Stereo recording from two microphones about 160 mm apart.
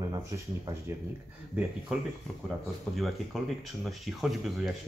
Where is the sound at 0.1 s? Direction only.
20° right (ahead or behind).